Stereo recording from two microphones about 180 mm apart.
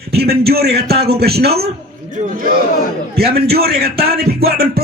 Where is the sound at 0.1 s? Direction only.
60° right (ahead or behind).